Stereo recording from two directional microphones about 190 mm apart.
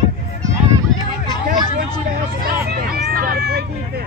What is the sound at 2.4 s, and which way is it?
Vehicle, 55° right (ahead or behind).